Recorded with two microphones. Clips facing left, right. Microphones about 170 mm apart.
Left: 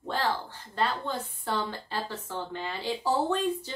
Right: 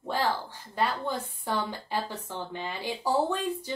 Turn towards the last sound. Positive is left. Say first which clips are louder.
# left 1 dB
turn(degrees=-10)  # may be behind; listen again after turning